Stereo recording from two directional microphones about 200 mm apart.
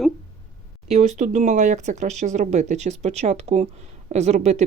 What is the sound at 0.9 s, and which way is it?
Speech, 35° right (ahead or behind).